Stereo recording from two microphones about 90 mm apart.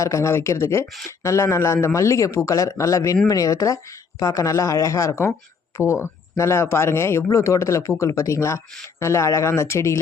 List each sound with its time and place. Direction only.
0.0 s speech: 35° left (ahead or behind)